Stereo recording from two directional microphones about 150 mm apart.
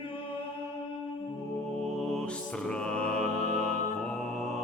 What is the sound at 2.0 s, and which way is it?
Mantra, 5° left (ahead or behind).